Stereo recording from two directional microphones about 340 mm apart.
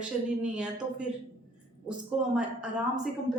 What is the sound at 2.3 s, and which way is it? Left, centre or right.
Speech, centre.